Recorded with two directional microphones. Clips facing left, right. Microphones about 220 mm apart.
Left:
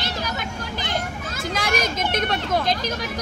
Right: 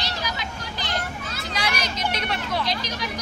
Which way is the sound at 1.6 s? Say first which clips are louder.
Left 4 dB; 50° left (ahead or behind).